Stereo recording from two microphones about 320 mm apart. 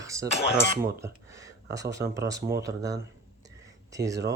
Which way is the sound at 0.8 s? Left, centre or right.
Centre.